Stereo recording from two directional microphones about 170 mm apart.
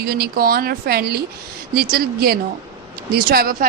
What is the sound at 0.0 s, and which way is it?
Speech, 65° right (ahead or behind).